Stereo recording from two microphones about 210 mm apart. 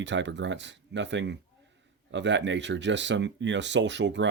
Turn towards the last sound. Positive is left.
turn(degrees=-60)  # may be behind; listen again after turning